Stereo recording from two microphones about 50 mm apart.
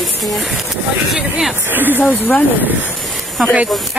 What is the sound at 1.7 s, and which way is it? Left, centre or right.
Speech, right.